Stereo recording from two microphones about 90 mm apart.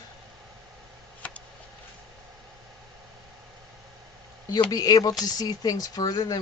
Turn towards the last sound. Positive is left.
turn(degrees=45)  # may be behind; listen again after turning